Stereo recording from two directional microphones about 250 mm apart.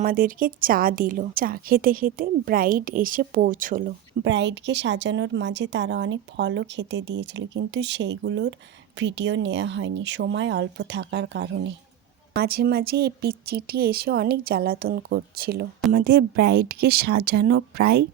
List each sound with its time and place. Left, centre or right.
0.0 s a woman's voice: right
4.2 s a woman's voice: right
15.8 s speech: centre
16.8 s a woman's voice: right